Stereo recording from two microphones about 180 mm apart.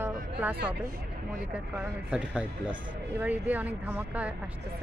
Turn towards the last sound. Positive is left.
turn(degrees=-10)  # may be behind; listen again after turning